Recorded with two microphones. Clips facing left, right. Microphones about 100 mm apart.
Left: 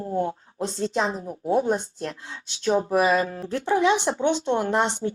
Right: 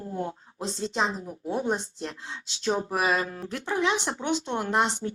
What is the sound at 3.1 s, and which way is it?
Speech, 30° left (ahead or behind).